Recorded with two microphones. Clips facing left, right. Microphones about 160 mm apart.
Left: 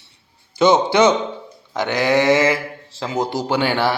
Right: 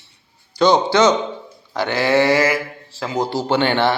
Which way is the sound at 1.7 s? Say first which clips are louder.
Even; 20° left (ahead or behind).